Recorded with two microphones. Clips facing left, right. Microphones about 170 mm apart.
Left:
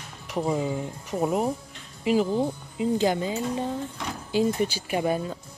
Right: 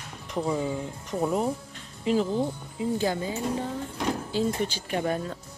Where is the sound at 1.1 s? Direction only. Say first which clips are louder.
Left 1 dB; 15° left (ahead or behind).